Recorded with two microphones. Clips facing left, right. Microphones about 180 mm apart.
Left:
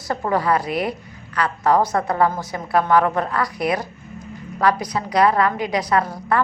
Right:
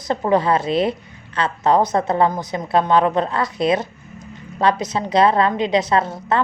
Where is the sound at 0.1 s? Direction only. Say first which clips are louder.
Right 3 dB; 20° right (ahead or behind).